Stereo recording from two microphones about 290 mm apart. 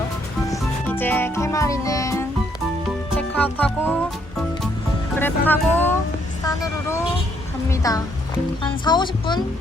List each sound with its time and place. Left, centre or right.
0.5 s music: centre
5.2 s a woman's voice: centre